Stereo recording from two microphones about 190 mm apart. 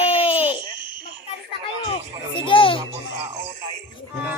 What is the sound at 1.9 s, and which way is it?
Speech, 25° left (ahead or behind).